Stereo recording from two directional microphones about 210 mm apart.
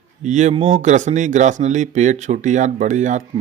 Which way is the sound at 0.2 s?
35° right (ahead or behind).